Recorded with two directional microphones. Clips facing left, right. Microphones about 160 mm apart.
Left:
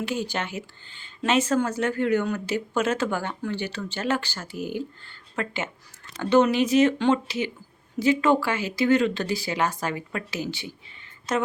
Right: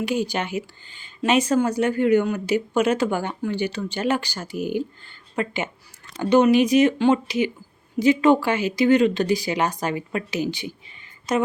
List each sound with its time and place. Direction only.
0.0 s speech: 15° right (ahead or behind)